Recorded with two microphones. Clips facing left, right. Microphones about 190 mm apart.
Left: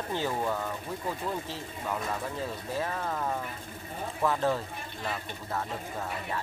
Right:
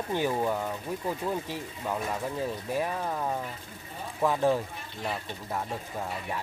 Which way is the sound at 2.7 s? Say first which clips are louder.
Right 1 dB; 15° right (ahead or behind).